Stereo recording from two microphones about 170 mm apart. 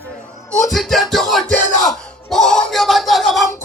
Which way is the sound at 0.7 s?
Centre (ahead or behind).